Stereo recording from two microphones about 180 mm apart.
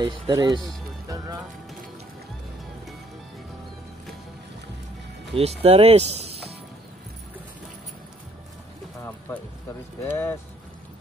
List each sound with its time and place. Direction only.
0.0 s speech: 20° right (ahead or behind)
0.7 s music: 20° right (ahead or behind)
5.3 s speech: 35° right (ahead or behind)
10.0 s speech: 15° left (ahead or behind)